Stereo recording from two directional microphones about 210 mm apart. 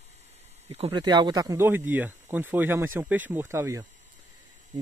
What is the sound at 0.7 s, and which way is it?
Speech, 25° right (ahead or behind).